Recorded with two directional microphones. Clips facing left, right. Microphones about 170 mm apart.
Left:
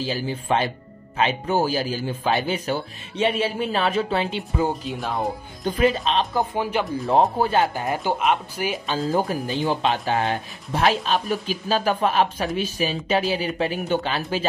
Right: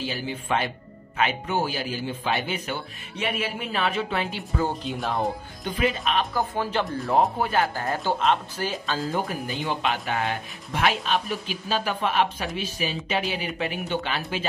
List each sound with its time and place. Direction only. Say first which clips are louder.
0.0 s speech: left 4 dB; 35° left (ahead or behind)
4.8 s speech: left 1 dB; centre (ahead or behind)
5.6 s speech: left 6 dB; 40° left (ahead or behind)
6.0 s speech: left 3 dB; 25° left (ahead or behind)
6.8 s speech: left 2 dB; centre (ahead or behind)
7.3 s speech: left 4 dB; 30° left (ahead or behind)
7.6 s speech: left 3 dB; 20° left (ahead or behind)
9.7 s speech: left 4 dB; 30° left (ahead or behind)